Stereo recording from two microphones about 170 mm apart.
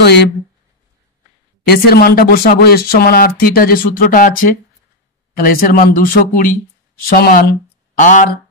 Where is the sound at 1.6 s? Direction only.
65° left (ahead or behind).